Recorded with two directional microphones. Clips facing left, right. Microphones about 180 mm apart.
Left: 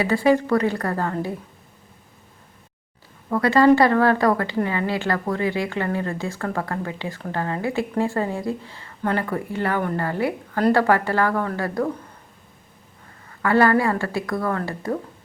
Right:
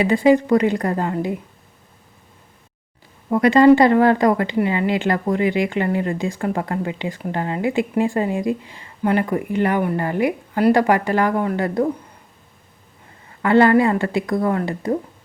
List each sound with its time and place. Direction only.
0.0 s speech: 20° right (ahead or behind)
3.2 s speech: 20° right (ahead or behind)
13.4 s speech: 20° right (ahead or behind)